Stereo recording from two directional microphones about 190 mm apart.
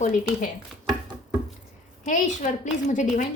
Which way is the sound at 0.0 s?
40° left (ahead or behind).